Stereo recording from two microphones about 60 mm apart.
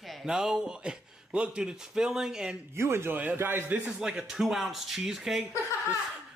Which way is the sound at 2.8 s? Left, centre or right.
Right.